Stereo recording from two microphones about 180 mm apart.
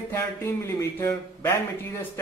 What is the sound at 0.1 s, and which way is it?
Speech, 15° left (ahead or behind).